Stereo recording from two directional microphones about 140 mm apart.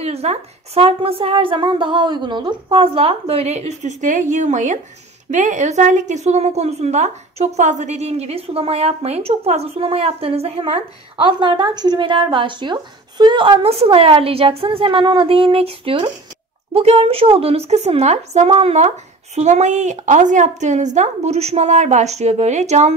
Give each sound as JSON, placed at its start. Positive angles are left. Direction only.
{"t": 0.0, "sound": "a woman's voice", "side_deg": -50}
{"t": 11.2, "sound": "a woman's voice", "side_deg": -35}